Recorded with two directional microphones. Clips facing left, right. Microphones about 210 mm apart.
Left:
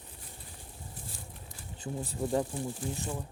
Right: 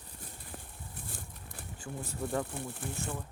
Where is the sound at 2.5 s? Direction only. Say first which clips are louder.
Left 4 dB; 60° right (ahead or behind).